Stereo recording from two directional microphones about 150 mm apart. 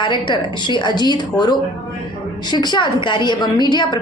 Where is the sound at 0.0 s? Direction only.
30° left (ahead or behind).